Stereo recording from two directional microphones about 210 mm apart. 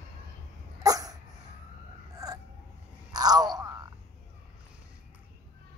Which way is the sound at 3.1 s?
20° right (ahead or behind).